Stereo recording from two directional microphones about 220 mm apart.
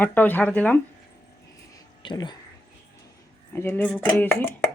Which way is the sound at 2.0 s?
20° left (ahead or behind).